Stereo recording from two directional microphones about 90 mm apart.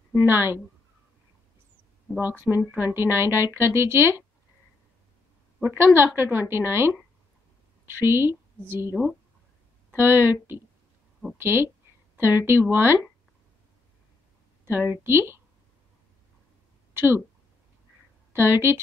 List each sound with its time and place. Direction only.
0.1 s a woman's voice: 25° right (ahead or behind)
2.1 s a woman's voice: 25° right (ahead or behind)
5.6 s a woman's voice: 25° right (ahead or behind)
11.3 s a woman's voice: 25° right (ahead or behind)
14.6 s a woman's voice: 25° right (ahead or behind)
18.3 s a woman's voice: 25° right (ahead or behind)